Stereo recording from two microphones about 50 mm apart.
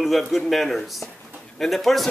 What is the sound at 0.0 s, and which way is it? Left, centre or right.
A man's voice, centre.